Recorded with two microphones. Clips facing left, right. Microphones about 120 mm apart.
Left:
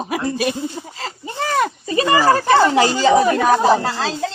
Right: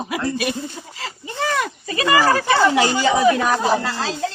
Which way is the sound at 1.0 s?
40° left (ahead or behind).